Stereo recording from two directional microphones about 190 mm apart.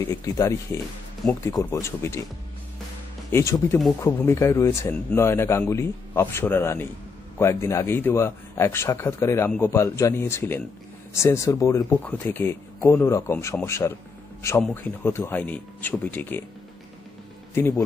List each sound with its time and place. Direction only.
0.0 s speech: 15° left (ahead or behind)
3.3 s speech: 15° left (ahead or behind)
17.6 s speech: 15° left (ahead or behind)